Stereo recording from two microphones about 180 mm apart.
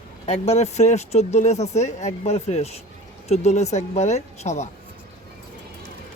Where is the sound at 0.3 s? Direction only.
35° left (ahead or behind).